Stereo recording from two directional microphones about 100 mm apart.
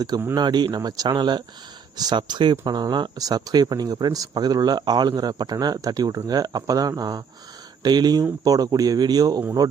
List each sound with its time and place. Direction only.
0.3 s speech: 50° right (ahead or behind)